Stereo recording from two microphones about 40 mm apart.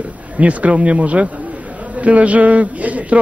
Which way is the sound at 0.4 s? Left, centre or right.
Right.